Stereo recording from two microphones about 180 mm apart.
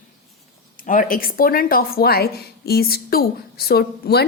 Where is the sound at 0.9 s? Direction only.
50° left (ahead or behind).